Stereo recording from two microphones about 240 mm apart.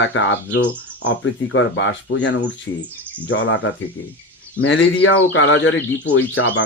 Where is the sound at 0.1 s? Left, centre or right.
Left.